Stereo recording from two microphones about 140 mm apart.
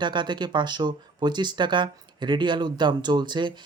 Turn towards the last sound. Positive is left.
turn(degrees=-35)  # may be behind; listen again after turning